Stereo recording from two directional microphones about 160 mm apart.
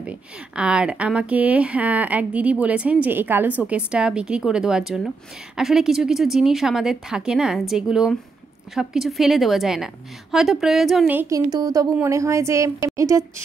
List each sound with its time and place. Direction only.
0.6 s speech: 5° right (ahead or behind)
11.1 s a woman's voice: 20° right (ahead or behind)